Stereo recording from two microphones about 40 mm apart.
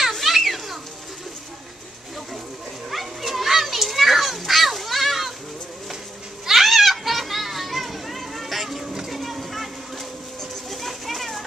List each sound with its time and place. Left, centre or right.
0.1 s children playing: centre
2.9 s children playing: centre
6.4 s children playing: centre
10.7 s children playing: centre